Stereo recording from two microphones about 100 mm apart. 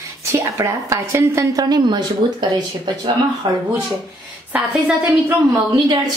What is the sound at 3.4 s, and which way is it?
Speech, 60° right (ahead or behind).